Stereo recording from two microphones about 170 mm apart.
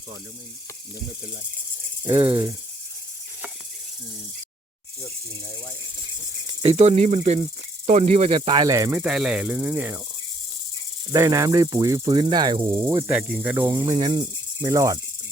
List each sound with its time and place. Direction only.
2.0 s speech: 30° right (ahead or behind)
6.6 s speech: 35° right (ahead or behind); by 10.0 s 10° right (ahead or behind)
11.1 s speech: 20° right (ahead or behind)